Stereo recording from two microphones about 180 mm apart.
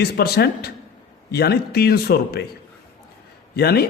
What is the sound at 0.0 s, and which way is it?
A man's voice, 60° left (ahead or behind).